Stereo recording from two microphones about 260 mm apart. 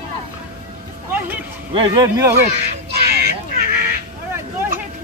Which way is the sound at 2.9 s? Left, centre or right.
Right.